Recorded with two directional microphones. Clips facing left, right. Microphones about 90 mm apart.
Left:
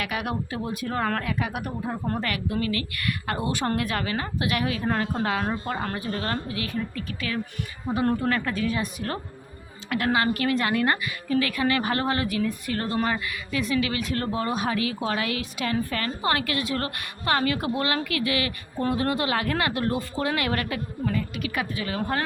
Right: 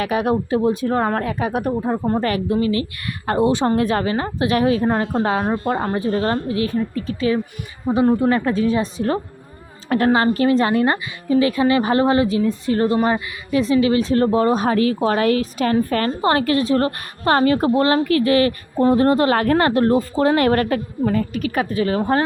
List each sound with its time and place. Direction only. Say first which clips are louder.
0.0 s a woman's voice: right 10 dB; 30° right (ahead or behind)
8.0 s speech: right 8 dB; 10° right (ahead or behind)
8.3 s a woman's voice: right 8 dB; 25° right (ahead or behind)